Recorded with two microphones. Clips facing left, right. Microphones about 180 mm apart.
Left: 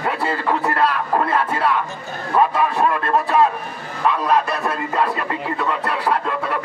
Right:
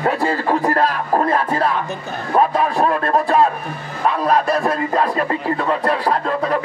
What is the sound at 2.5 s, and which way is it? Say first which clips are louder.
Speech: right 2 dB; 35° right (ahead or behind).